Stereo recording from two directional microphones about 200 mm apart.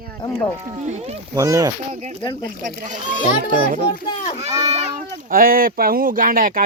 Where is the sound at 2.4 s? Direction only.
40° right (ahead or behind).